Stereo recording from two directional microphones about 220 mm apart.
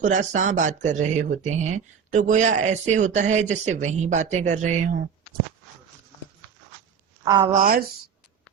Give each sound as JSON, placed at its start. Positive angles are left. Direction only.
{"t": 0.0, "sound": "speech", "side_deg": -35}
{"t": 7.5, "sound": "speech", "side_deg": -40}